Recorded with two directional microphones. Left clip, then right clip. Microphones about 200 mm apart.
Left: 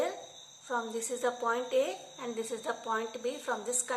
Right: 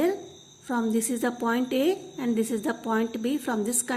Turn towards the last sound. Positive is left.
turn(degrees=-45)  # may be behind; listen again after turning